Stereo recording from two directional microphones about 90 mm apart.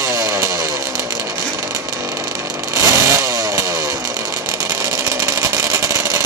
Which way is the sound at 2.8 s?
35° right (ahead or behind).